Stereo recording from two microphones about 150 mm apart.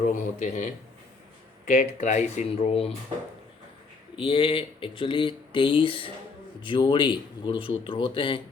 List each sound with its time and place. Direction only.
0.1 s a man's voice: 55° left (ahead or behind)
4.2 s speech: 35° left (ahead or behind)